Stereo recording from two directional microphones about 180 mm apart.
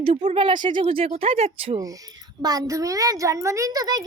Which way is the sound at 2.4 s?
20° right (ahead or behind).